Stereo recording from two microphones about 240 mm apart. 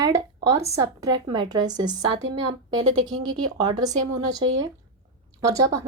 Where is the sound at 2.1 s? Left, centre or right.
Right.